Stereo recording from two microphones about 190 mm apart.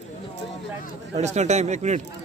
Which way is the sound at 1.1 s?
35° right (ahead or behind).